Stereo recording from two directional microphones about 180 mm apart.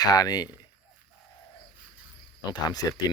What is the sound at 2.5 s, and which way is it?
Speech, 20° left (ahead or behind).